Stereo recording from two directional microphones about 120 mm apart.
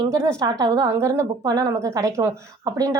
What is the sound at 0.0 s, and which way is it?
A woman's voice, 25° right (ahead or behind).